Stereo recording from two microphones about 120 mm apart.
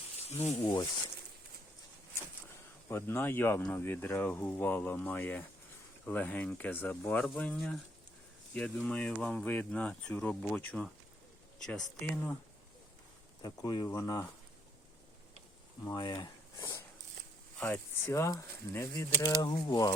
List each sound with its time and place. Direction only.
0.3 s speech: 60° left (ahead or behind)
2.9 s speech: 20° left (ahead or behind)
13.4 s speech: 35° left (ahead or behind)
15.8 s speech: 30° left (ahead or behind)
17.6 s speech: 15° left (ahead or behind)
19.6 s speech: 35° left (ahead or behind)